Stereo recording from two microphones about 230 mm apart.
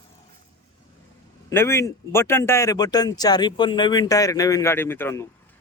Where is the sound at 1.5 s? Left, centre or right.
Centre.